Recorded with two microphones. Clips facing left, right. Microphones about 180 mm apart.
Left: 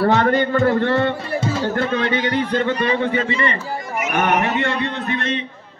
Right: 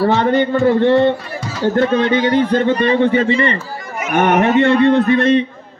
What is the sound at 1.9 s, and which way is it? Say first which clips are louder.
Speech: right 6 dB; 30° right (ahead or behind).